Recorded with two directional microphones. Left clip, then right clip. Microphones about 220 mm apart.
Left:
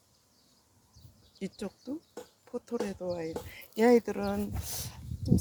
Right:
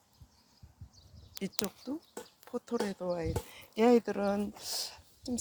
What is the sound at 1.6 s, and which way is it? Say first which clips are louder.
Speech: right 1 dB; 15° right (ahead or behind).